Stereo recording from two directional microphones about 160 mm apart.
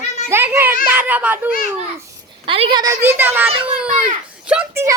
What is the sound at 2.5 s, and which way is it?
Speech, 35° right (ahead or behind).